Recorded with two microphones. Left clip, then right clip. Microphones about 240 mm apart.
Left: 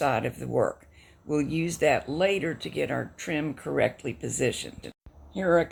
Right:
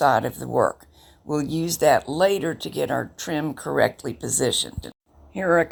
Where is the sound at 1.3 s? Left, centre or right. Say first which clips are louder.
Right 2 dB; right.